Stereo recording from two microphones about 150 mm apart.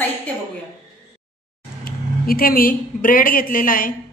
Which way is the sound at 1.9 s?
75° left (ahead or behind).